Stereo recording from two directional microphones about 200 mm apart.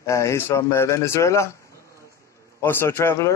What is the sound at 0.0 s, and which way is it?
Speech, 15° left (ahead or behind).